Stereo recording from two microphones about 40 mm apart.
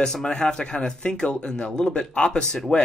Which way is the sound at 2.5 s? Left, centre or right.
Centre.